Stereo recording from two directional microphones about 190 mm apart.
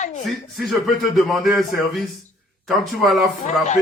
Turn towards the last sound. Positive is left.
turn(degrees=0)  # may be behind; listen again after turning